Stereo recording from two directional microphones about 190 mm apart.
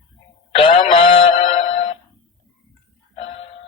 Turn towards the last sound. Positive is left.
turn(degrees=30)  # may be behind; listen again after turning